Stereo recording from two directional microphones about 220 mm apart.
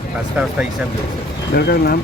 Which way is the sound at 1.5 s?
45° left (ahead or behind).